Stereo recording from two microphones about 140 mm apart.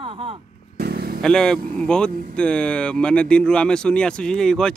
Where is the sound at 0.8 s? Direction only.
90° right.